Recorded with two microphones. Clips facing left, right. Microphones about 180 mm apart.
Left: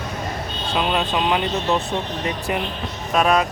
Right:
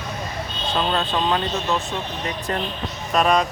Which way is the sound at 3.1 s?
5° left (ahead or behind).